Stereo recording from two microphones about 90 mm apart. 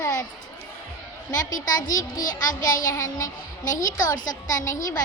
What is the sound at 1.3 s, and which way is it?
A child's voice, 45° left (ahead or behind).